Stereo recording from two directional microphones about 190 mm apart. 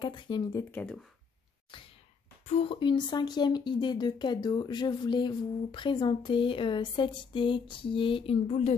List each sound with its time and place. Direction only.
0.0 s speech: 25° left (ahead or behind); by 1.0 s 5° left (ahead or behind)
2.4 s speech: 35° left (ahead or behind)